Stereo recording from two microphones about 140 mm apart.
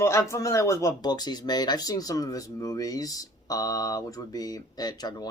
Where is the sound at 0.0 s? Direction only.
20° left (ahead or behind).